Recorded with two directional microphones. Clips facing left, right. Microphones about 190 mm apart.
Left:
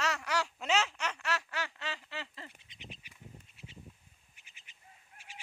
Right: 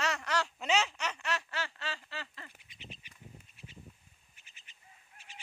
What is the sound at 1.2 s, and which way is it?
Duck, 10° left (ahead or behind).